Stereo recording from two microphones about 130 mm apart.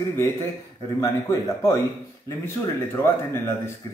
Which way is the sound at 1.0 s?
25° left (ahead or behind).